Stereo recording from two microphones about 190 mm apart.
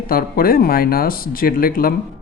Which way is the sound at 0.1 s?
50° left (ahead or behind).